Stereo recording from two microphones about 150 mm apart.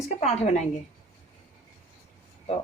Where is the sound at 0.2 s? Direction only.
45° left (ahead or behind).